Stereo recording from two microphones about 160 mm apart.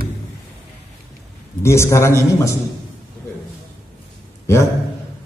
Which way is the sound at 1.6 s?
15° left (ahead or behind).